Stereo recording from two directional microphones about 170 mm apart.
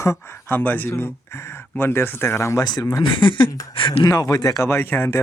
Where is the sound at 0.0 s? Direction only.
15° left (ahead or behind).